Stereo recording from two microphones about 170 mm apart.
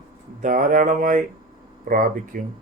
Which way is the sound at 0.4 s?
55° right (ahead or behind).